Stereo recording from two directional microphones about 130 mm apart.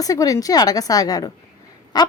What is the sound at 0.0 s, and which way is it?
A woman's voice, 30° left (ahead or behind).